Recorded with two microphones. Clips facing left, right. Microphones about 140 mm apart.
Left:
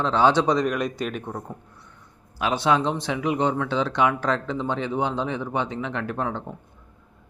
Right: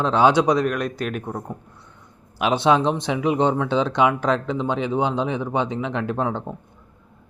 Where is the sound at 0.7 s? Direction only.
Centre (ahead or behind).